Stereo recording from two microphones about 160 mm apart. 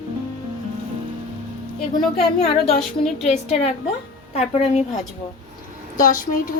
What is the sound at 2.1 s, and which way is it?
A woman's voice, 40° left (ahead or behind).